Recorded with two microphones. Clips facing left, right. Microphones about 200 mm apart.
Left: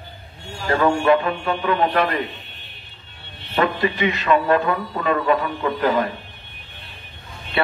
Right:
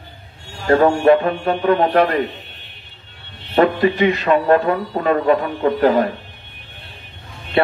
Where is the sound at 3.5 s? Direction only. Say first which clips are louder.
Right 6 dB; 35° right (ahead or behind).